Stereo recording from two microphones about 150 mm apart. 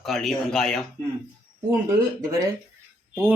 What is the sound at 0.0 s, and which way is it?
Speech, centre (ahead or behind).